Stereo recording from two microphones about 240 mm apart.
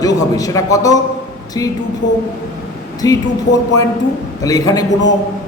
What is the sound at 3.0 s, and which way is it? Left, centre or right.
Speech, centre.